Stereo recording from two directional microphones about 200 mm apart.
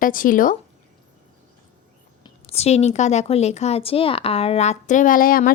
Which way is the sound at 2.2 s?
30° left (ahead or behind).